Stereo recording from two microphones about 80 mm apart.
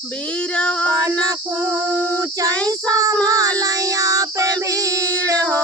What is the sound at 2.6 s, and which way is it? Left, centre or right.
Child singing, right.